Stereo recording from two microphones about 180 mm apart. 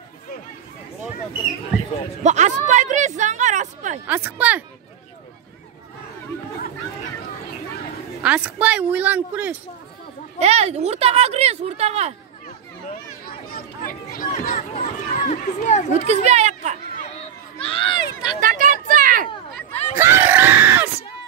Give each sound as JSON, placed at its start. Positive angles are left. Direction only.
{"t": 2.2, "sound": "a sound", "side_deg": -40}
{"t": 4.1, "sound": "a woman's voice", "side_deg": -10}
{"t": 8.2, "sound": "a woman's voice", "side_deg": -5}
{"t": 10.4, "sound": "speech", "side_deg": -35}
{"t": 12.8, "sound": "chatter", "side_deg": 55}
{"t": 15.1, "sound": "speech", "side_deg": 45}
{"t": 16.1, "sound": "speech", "side_deg": -40}
{"t": 17.6, "sound": "run", "side_deg": 30}
{"t": 18.4, "sound": "a sound", "side_deg": -50}
{"t": 19.7, "sound": "a sound", "side_deg": 35}
{"t": 20.0, "sound": "screaming", "side_deg": -15}